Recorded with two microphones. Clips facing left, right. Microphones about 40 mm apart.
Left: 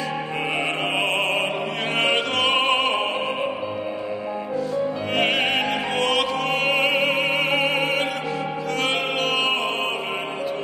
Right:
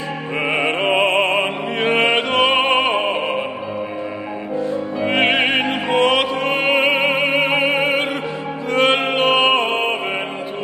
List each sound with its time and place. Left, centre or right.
0.5 s opera: right
5.1 s opera: right
8.7 s music: right